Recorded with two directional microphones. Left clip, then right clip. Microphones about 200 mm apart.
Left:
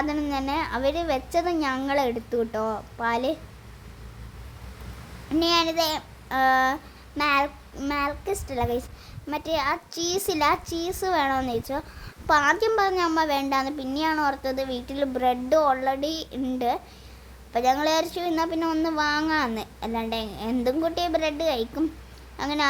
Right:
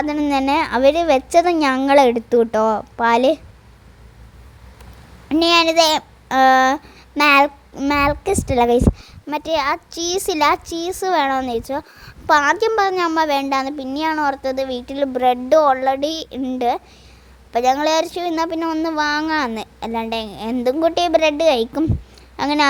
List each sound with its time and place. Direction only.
0.0 s a child's voice: 35° right (ahead or behind)
5.3 s a child's voice: 35° right (ahead or behind)